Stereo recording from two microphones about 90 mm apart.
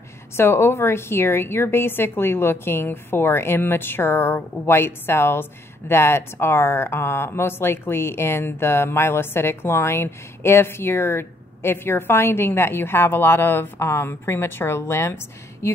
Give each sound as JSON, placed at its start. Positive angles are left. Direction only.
{"t": 0.4, "sound": "a woman's voice", "side_deg": 30}